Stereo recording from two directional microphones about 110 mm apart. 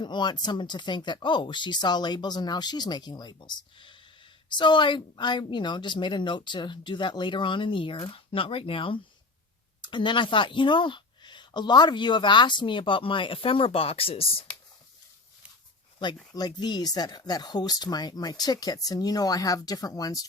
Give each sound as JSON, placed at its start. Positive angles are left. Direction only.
{"t": 0.0, "sound": "a woman's voice", "side_deg": 45}
{"t": 8.1, "sound": "a woman's voice", "side_deg": 55}
{"t": 16.3, "sound": "speech", "side_deg": 40}